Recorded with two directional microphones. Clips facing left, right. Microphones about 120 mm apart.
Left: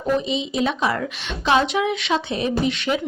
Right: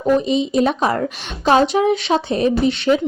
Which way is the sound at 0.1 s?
45° right (ahead or behind).